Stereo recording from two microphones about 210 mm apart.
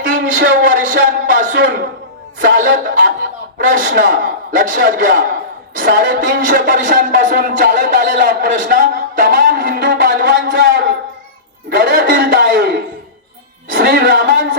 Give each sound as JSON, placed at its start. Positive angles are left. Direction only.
{"t": 0.4, "sound": "a man's voice", "side_deg": -50}